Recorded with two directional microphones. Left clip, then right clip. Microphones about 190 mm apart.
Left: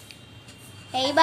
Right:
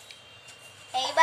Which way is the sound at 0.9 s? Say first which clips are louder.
Left 4 dB; 25° left (ahead or behind).